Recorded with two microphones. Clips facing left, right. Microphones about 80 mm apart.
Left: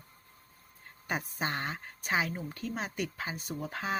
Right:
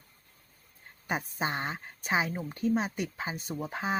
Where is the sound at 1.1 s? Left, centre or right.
Centre.